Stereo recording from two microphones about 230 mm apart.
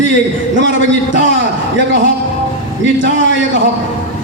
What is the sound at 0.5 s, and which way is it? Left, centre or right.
Speech, right.